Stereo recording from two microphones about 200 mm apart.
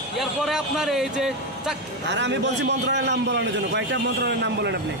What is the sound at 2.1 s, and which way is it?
A man's voice, 60° right (ahead or behind).